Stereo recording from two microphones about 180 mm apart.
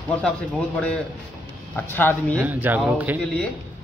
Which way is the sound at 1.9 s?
10° left (ahead or behind).